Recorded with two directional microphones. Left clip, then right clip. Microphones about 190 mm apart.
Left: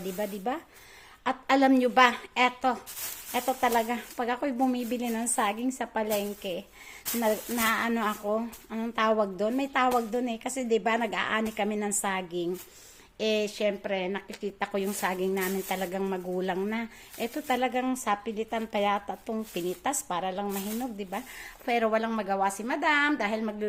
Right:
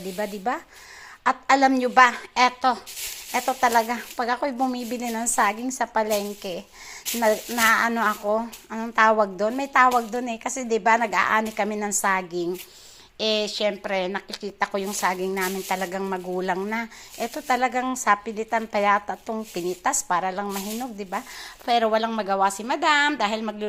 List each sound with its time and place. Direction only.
0.2 s a woman's voice: centre (ahead or behind)